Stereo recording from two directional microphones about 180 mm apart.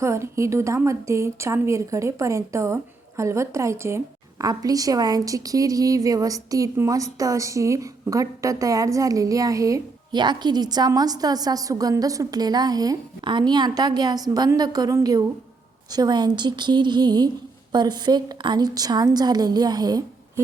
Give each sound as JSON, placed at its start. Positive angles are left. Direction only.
{"t": 0.0, "sound": "a woman's voice", "side_deg": -15}